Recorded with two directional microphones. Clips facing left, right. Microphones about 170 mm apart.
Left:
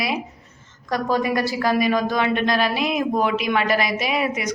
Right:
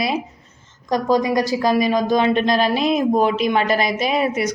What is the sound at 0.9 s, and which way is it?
A woman's voice, 20° right (ahead or behind).